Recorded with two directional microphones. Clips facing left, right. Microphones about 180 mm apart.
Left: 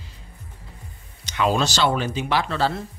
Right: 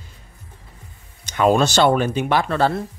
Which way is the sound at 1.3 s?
50° right (ahead or behind).